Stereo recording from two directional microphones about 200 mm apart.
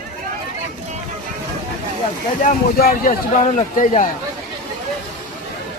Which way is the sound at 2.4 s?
45° left (ahead or behind).